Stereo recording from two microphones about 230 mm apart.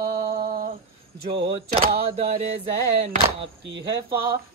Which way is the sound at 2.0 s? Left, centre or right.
Right.